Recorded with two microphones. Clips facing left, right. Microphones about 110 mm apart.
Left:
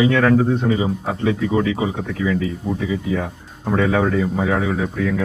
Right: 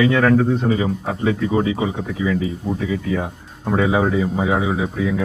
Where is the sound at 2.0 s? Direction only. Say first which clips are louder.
Even; 10° right (ahead or behind).